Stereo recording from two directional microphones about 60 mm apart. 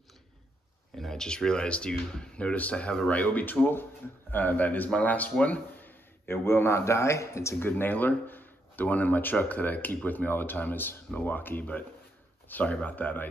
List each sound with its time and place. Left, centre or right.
0.9 s a man's voice: centre; by 7.7 s left
7.7 s speech: left